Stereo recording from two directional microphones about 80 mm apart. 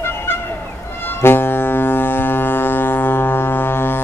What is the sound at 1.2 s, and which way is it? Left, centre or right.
Foghorn, left.